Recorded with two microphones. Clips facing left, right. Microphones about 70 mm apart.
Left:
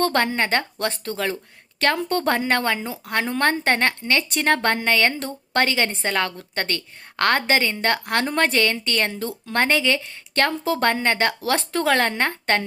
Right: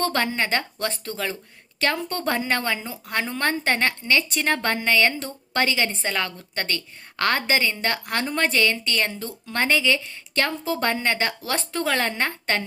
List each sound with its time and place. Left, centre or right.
0.0 s a woman's voice: left
9.1 s a woman's voice: left
10.6 s speech: left
10.8 s a woman's voice: left